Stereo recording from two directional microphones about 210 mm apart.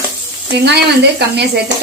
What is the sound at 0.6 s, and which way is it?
Speech, 50° right (ahead or behind).